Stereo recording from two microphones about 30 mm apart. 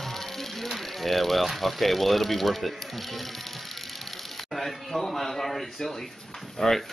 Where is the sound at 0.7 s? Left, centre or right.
Centre.